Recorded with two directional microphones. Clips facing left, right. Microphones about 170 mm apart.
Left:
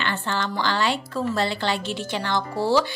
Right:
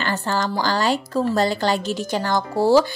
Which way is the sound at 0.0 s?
40° right (ahead or behind).